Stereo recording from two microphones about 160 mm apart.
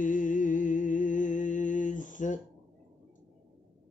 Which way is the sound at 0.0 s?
55° left (ahead or behind).